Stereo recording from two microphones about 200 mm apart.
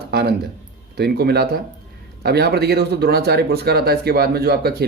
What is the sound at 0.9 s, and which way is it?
Speech, 50° right (ahead or behind).